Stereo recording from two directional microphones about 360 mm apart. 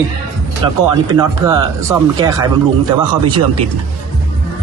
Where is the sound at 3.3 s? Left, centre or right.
Right.